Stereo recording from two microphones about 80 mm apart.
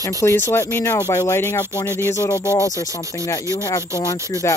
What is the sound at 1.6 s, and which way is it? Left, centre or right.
Speech, left.